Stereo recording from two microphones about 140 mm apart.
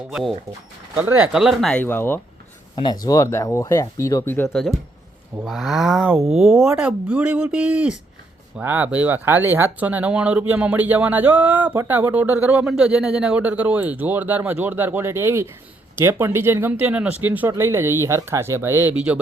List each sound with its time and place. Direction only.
0.1 s speech: 5° right (ahead or behind)
0.9 s speech: 15° right (ahead or behind)
1.3 s speech: centre (ahead or behind)
1.8 s speech: 15° left (ahead or behind)
2.7 s speech: 30° left (ahead or behind)
4.4 s speech: centre (ahead or behind)